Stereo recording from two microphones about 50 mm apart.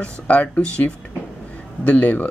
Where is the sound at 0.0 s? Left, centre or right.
Left.